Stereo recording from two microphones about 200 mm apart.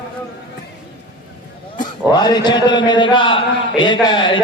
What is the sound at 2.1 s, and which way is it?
A man's voice, 20° left (ahead or behind).